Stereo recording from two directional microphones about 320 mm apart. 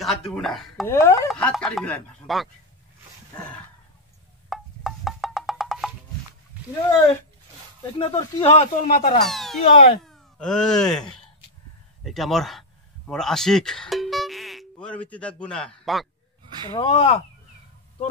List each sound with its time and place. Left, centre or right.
0.4 s speech: centre
4.5 s wood block: centre
8.0 s speech: centre
9.2 s a child's voice: centre
9.7 s speech: centre
10.0 s speech: centre
16.7 s speech: centre